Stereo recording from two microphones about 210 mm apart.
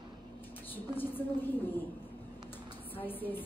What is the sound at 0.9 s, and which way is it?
Speech, 10° left (ahead or behind).